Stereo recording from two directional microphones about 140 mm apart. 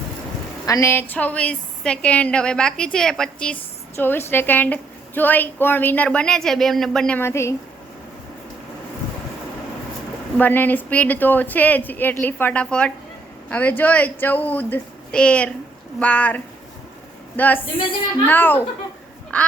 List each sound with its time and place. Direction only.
0.6 s a woman's voice: 25° left (ahead or behind); by 7.2 s 5° left (ahead or behind)
7.2 s a woman's voice: 20° left (ahead or behind)
10.3 s a woman's voice: 15° left (ahead or behind)